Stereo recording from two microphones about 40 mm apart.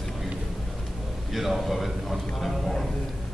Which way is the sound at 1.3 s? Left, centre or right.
Centre.